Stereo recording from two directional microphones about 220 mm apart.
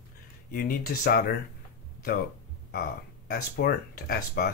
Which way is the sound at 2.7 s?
45° left (ahead or behind).